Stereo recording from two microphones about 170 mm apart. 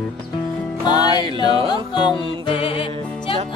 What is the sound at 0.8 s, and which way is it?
Music, 25° left (ahead or behind).